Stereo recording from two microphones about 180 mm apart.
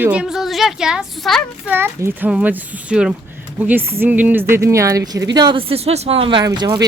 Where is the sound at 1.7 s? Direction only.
15° right (ahead or behind).